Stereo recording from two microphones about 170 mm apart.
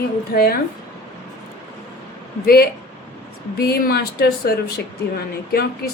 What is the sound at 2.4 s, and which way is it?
A woman's voice, 65° left (ahead or behind).